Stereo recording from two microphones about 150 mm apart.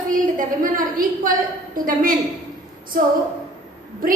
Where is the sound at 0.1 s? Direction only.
65° right (ahead or behind).